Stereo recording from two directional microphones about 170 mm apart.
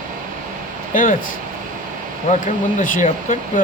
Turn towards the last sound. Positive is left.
turn(degrees=50)  # may be behind; listen again after turning